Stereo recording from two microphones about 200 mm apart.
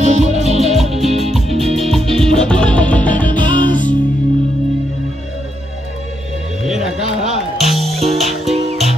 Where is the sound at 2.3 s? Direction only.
5° left (ahead or behind).